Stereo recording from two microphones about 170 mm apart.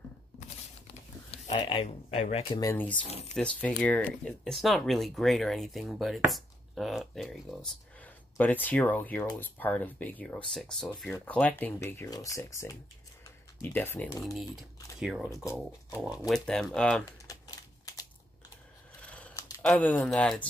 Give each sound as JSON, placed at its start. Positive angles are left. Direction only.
{"t": 1.3, "sound": "speech", "side_deg": 35}
{"t": 2.5, "sound": "speech", "side_deg": 15}
{"t": 15.0, "sound": "speech", "side_deg": -5}
{"t": 17.3, "sound": "typing", "side_deg": 20}
{"t": 18.9, "sound": "scissors", "side_deg": 5}
{"t": 19.6, "sound": "speech", "side_deg": 5}